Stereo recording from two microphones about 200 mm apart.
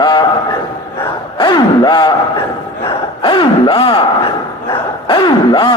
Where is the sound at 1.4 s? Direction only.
20° left (ahead or behind).